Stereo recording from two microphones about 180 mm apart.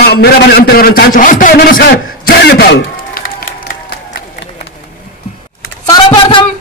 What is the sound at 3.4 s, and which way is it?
Applause, 60° left (ahead or behind).